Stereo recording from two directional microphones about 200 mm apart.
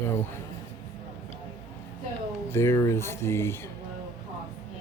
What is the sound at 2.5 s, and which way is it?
Speech, 15° left (ahead or behind).